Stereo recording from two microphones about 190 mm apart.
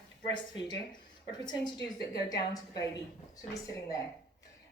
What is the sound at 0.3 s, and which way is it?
A woman's voice, 25° left (ahead or behind).